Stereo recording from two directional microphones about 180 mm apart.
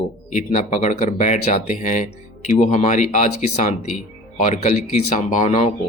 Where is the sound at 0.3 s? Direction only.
40° left (ahead or behind).